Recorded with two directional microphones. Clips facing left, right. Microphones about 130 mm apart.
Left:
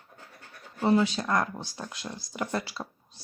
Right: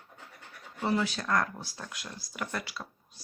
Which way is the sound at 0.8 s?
25° left (ahead or behind).